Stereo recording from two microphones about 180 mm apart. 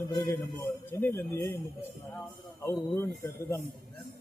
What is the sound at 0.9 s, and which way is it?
Speech, 15° left (ahead or behind).